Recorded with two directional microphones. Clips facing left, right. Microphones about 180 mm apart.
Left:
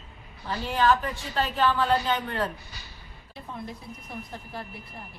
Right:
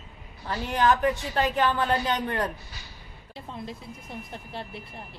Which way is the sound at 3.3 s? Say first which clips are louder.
Even; 25° right (ahead or behind).